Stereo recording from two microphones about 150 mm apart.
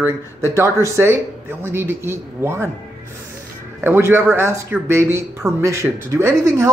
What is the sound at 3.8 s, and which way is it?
Speech, 15° right (ahead or behind).